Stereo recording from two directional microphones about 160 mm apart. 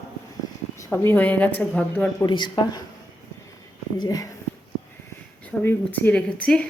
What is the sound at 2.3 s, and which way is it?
Speech, 30° left (ahead or behind).